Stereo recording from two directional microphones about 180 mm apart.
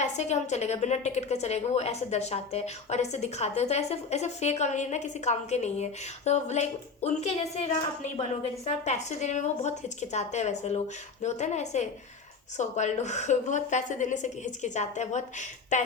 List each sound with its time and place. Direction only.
0.0 s a woman's voice: 40° left (ahead or behind)
8.6 s a woman's voice: 40° left (ahead or behind)